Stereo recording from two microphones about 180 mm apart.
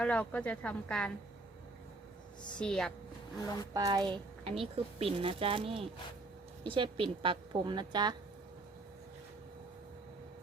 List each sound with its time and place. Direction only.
0.0 s a woman's voice: 5° left (ahead or behind)
2.6 s speech: 5° left (ahead or behind)
3.4 s speech: 20° left (ahead or behind)
3.8 s a woman's voice: 20° right (ahead or behind)
4.4 s a woman's voice: 35° right (ahead or behind)